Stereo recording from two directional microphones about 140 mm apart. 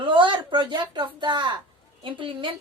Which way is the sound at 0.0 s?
35° right (ahead or behind).